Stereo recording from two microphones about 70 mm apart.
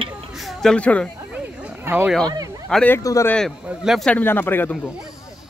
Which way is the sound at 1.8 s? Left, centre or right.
Right.